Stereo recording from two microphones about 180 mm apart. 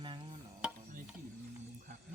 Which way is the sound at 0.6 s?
5° right (ahead or behind).